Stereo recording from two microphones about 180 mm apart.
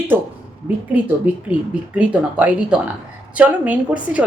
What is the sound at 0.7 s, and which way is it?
Speech, 10° right (ahead or behind).